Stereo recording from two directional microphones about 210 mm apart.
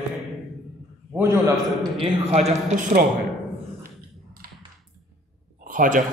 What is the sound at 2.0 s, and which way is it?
A man's voice, 30° right (ahead or behind).